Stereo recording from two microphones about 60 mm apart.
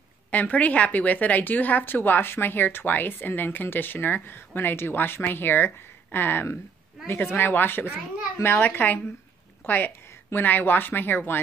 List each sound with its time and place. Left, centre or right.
0.3 s a woman's voice: left